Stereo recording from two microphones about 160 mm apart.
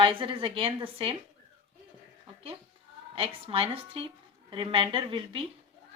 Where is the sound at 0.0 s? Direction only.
35° right (ahead or behind).